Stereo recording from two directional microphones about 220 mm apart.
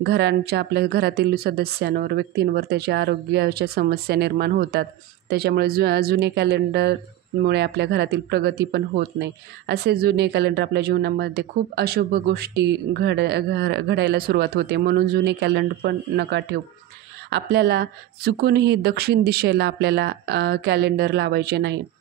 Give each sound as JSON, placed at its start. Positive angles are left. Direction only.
{"t": 0.0, "sound": "speech", "side_deg": -50}